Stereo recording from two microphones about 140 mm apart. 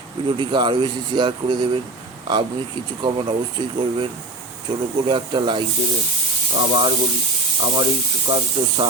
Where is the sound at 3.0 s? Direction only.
35° right (ahead or behind).